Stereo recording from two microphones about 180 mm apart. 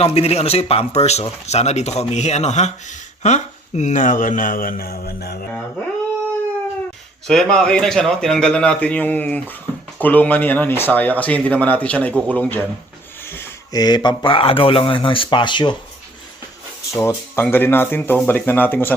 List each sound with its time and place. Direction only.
0.0 s speech: 35° left (ahead or behind); by 5.5 s 60° left (ahead or behind)
7.3 s a man's voice: centre (ahead or behind); by 15.7 s 25° left (ahead or behind)
16.9 s speech: 15° left (ahead or behind)